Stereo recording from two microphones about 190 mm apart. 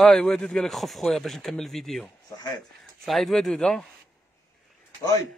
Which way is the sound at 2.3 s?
20° left (ahead or behind).